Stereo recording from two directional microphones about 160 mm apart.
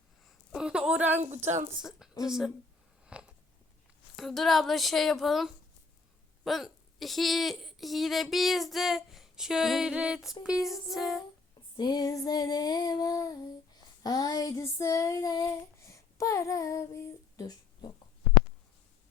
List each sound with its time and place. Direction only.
0.3 s a sound: 5° right (ahead or behind)
1.2 s speech: 45° right (ahead or behind)
1.8 s a woman's voice: 5° right (ahead or behind)
3.1 s a sound: 5° right (ahead or behind)
4.2 s a woman's voice: centre (ahead or behind)
11.8 s female singing: 25° left (ahead or behind)
14.0 s child singing: 20° left (ahead or behind)